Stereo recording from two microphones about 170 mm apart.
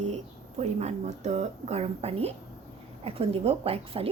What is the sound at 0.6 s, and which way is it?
A woman's voice, 40° right (ahead or behind).